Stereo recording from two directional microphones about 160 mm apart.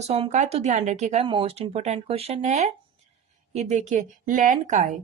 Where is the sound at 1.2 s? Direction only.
35° right (ahead or behind).